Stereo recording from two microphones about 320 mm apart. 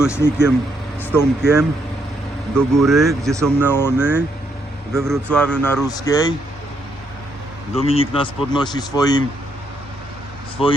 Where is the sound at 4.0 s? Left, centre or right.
Centre.